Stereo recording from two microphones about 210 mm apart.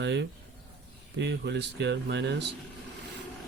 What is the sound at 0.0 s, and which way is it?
Speech, 55° right (ahead or behind).